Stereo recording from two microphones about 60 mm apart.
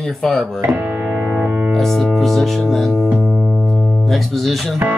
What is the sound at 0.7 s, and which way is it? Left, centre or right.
Music, right.